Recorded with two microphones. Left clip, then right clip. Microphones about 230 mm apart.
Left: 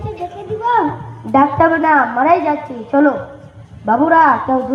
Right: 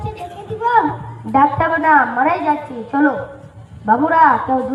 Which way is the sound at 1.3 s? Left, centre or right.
Left.